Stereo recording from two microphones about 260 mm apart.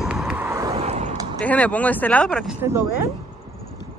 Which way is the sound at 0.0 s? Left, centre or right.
Centre.